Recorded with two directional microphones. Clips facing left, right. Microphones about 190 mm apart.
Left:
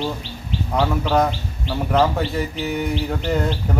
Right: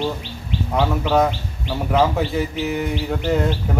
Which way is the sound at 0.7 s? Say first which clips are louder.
Right 1 dB; centre (ahead or behind).